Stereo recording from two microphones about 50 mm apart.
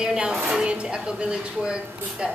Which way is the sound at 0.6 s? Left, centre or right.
Right.